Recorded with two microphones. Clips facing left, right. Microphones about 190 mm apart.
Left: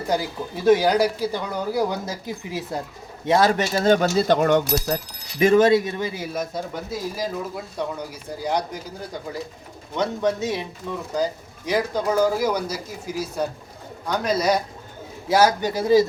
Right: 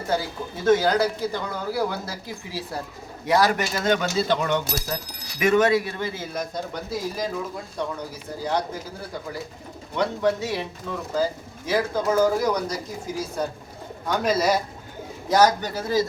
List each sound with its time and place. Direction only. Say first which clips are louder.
0.1 s speech: left 1 dB; 15° left (ahead or behind); by 4.9 s 45° left (ahead or behind)
5.4 s speech: left 4 dB; 30° left (ahead or behind); by 8.6 s 15° left (ahead or behind)
9.9 s speech: even; 20° left (ahead or behind); by 14.6 s 5° right (ahead or behind)
15.3 s speech: left 1 dB; 10° left (ahead or behind)